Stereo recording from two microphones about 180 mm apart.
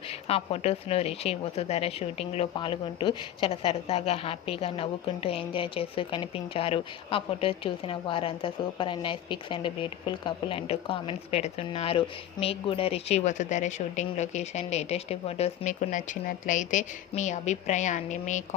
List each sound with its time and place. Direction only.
0.1 s speech: 35° left (ahead or behind)